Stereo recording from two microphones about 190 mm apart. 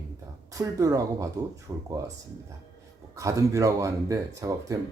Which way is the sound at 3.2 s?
15° right (ahead or behind).